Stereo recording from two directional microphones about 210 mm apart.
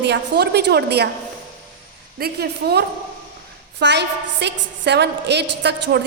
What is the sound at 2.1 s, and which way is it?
A woman's voice, 50° right (ahead or behind).